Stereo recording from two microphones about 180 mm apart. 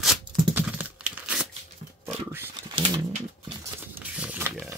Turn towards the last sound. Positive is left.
turn(degrees=-10)  # may be behind; listen again after turning